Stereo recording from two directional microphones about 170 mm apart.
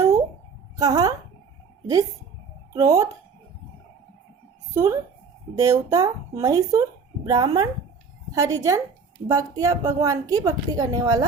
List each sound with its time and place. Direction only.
0.8 s a woman's voice: 20° right (ahead or behind)
2.7 s a woman's voice: 20° right (ahead or behind)
4.7 s a woman's voice: 20° right (ahead or behind)